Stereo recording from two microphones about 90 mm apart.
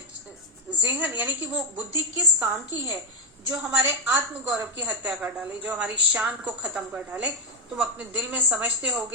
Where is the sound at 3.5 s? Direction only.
25° right (ahead or behind); by 6.8 s 5° right (ahead or behind).